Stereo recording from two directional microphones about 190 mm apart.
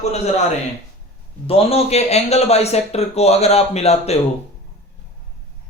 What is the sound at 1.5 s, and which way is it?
Speech, 30° left (ahead or behind).